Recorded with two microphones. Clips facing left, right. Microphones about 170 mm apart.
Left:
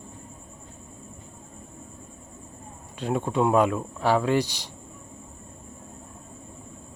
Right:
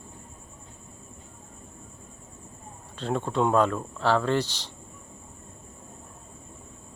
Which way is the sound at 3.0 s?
10° left (ahead or behind).